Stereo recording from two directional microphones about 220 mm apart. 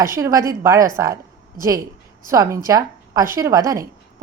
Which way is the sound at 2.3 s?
15° right (ahead or behind).